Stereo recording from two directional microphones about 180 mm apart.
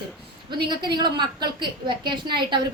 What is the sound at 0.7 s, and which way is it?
A woman's voice, 25° right (ahead or behind).